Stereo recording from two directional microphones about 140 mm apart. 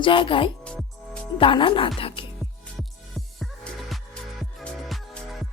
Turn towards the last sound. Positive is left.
turn(degrees=5)  # may be behind; listen again after turning